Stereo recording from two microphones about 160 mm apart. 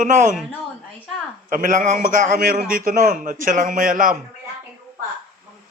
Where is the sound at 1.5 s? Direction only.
55° right (ahead or behind).